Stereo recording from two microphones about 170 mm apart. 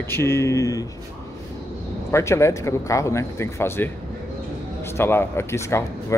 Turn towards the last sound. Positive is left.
turn(degrees=15)  # may be behind; listen again after turning